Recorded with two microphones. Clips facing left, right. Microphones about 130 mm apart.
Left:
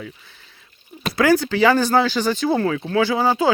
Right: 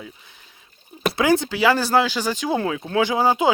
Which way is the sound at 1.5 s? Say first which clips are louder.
Left 2 dB; 5° right (ahead or behind).